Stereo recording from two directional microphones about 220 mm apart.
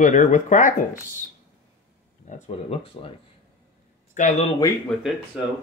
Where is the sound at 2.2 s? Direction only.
30° left (ahead or behind).